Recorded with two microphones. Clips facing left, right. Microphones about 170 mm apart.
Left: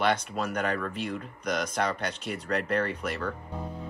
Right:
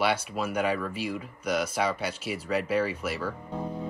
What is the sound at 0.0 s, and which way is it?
Speech, 10° right (ahead or behind).